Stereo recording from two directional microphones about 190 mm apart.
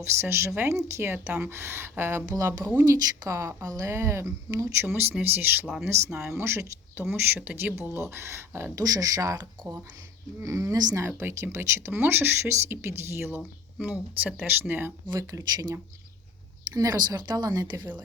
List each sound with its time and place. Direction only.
0.0 s speech: 15° right (ahead or behind)